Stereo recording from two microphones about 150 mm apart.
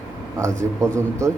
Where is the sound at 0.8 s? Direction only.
20° right (ahead or behind).